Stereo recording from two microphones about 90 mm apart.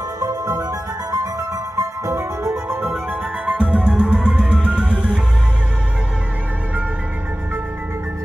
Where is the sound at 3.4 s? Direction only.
10° right (ahead or behind).